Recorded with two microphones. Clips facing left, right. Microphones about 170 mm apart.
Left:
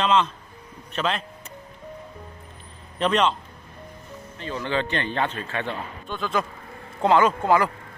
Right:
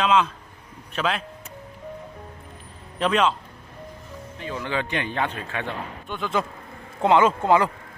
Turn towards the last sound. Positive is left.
turn(degrees=-20)  # may be behind; listen again after turning